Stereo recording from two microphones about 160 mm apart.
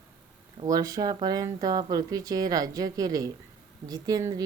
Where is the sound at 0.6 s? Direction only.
25° right (ahead or behind).